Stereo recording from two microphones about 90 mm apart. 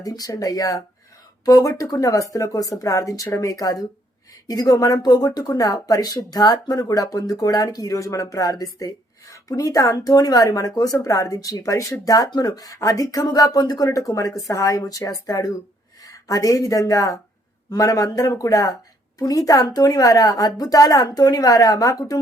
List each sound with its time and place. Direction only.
0.0 s speech: 40° left (ahead or behind)